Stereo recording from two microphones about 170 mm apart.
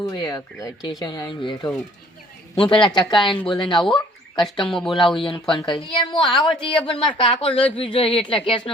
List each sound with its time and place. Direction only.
0.0 s speech: 20° left (ahead or behind)
4.6 s speech: centre (ahead or behind)
5.2 s a woman's voice: 30° left (ahead or behind)